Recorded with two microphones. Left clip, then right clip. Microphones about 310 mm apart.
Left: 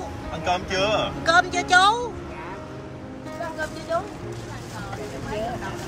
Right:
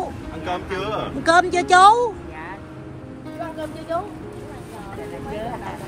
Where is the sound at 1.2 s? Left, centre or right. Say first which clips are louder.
Right 5 dB; right.